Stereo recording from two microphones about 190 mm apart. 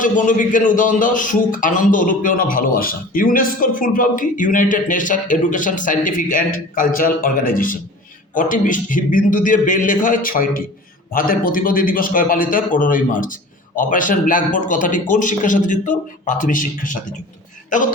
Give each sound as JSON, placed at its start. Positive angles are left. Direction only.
{"t": 0.0, "sound": "a man's voice", "side_deg": 45}